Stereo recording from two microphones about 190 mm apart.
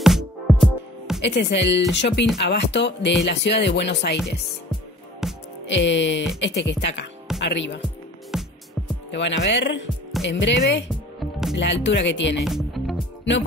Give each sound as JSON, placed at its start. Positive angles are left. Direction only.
{"t": 0.0, "sound": "music", "side_deg": 0}
{"t": 1.2, "sound": "speech", "side_deg": 65}
{"t": 5.2, "sound": "music", "side_deg": 0}
{"t": 5.7, "sound": "speech", "side_deg": 70}
{"t": 8.3, "sound": "music", "side_deg": -5}
{"t": 9.1, "sound": "speech", "side_deg": 70}
{"t": 11.1, "sound": "music", "side_deg": 0}
{"t": 11.5, "sound": "speech", "side_deg": 70}
{"t": 12.4, "sound": "speech", "side_deg": 0}